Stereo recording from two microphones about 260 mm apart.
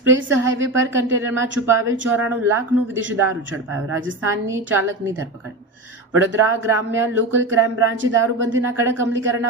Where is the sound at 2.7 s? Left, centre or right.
Right.